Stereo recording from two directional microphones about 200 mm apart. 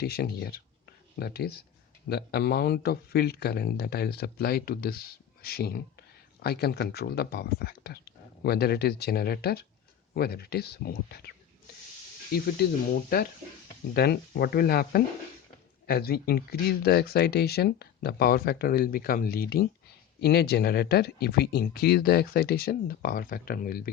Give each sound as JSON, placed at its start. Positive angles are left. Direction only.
{"t": 0.0, "sound": "speech", "side_deg": 50}
{"t": 13.9, "sound": "speech", "side_deg": 55}